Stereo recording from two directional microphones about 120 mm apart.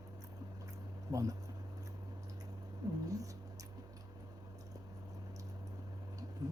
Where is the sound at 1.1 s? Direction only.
30° right (ahead or behind).